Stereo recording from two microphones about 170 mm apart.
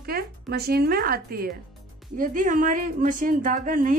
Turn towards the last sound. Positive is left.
turn(degrees=-50)  # may be behind; listen again after turning